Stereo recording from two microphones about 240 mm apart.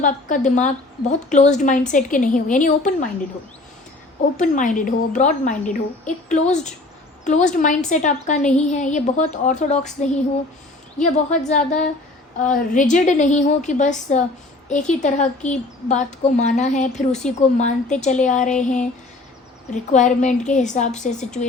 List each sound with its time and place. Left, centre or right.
0.0 s a woman's voice: left
4.4 s a woman's voice: left